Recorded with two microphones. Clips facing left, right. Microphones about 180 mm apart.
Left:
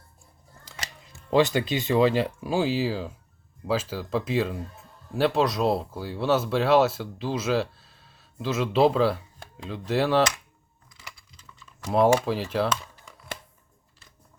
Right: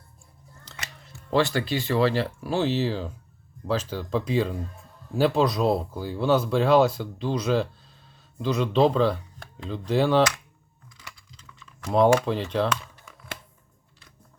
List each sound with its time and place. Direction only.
1.0 s speech: 15° left (ahead or behind)
11.9 s speech: 5° left (ahead or behind)